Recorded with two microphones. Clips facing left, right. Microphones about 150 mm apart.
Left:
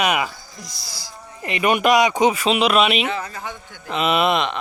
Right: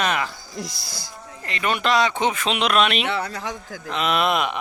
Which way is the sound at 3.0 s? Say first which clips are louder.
Right 1 dB; 70° right (ahead or behind).